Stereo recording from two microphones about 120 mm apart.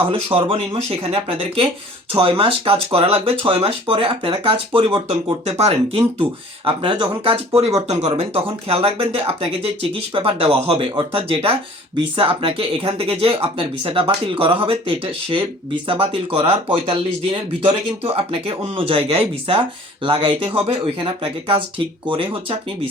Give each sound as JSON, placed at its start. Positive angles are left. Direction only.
{"t": 0.0, "sound": "speech", "side_deg": -50}
{"t": 6.7, "sound": "speech", "side_deg": -40}
{"t": 7.9, "sound": "speech", "side_deg": -60}